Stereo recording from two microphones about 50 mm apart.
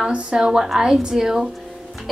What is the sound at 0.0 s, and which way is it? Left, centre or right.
A woman's voice, right.